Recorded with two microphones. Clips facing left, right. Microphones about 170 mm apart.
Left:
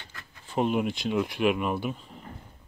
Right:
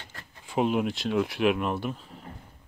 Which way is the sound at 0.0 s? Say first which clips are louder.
Right 1 dB; 40° right (ahead or behind).